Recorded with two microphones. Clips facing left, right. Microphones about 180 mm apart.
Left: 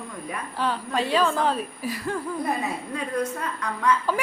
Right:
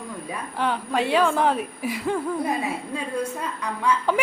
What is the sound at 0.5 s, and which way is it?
A woman's voice, 15° right (ahead or behind).